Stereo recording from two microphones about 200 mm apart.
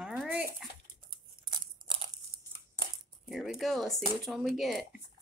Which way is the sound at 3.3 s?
Centre (ahead or behind).